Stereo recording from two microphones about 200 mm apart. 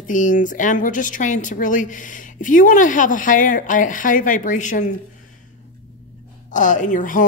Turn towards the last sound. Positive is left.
turn(degrees=40)  # may be behind; listen again after turning